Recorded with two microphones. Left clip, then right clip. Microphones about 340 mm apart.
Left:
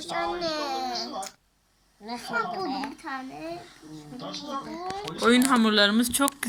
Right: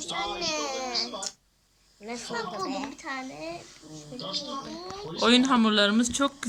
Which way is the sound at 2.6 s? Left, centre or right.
Centre.